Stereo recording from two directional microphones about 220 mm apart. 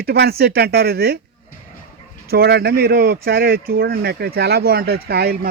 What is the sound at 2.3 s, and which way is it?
Speech, 45° right (ahead or behind).